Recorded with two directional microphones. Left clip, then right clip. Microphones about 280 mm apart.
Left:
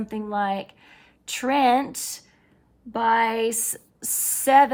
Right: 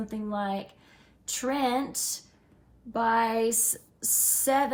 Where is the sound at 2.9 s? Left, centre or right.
Left.